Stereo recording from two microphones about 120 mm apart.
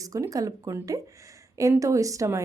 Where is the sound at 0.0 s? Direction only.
30° right (ahead or behind).